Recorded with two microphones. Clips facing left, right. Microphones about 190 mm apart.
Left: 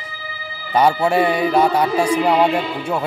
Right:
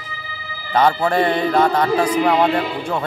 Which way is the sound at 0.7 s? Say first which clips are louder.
Left 1 dB; 10° left (ahead or behind).